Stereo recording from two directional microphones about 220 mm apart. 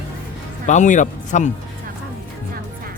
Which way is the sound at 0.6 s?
35° left (ahead or behind).